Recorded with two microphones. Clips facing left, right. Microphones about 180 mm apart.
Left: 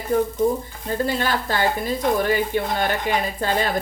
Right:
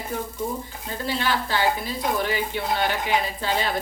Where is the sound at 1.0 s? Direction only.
45° left (ahead or behind).